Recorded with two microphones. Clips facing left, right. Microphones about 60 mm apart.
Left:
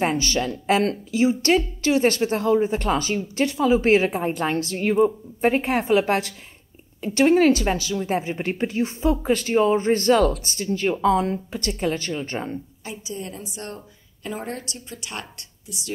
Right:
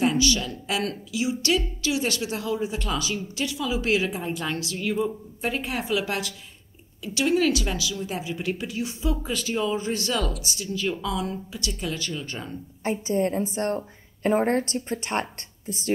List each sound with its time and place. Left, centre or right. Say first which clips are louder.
0.0 s a woman's voice: left 1 dB; left
12.8 s a woman's voice: right 13 dB; right